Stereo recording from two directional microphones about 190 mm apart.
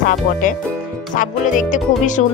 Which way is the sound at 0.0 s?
45° left (ahead or behind).